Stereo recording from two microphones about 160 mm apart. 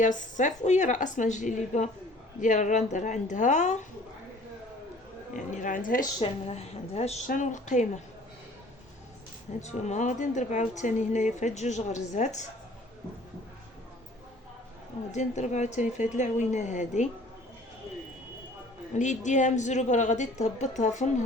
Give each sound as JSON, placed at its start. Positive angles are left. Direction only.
{"t": 0.0, "sound": "speech", "side_deg": 50}
{"t": 5.5, "sound": "speech", "side_deg": 55}
{"t": 6.2, "sound": "a woman's voice", "side_deg": 40}
{"t": 9.6, "sound": "speech", "side_deg": 45}
{"t": 15.1, "sound": "speech", "side_deg": 45}
{"t": 18.9, "sound": "speech", "side_deg": 50}